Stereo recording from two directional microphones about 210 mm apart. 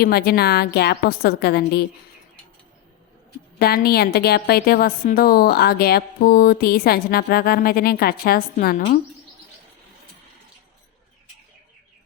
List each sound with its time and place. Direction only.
0.0 s a woman's voice: 50° left (ahead or behind)
3.6 s a woman's voice: 45° left (ahead or behind)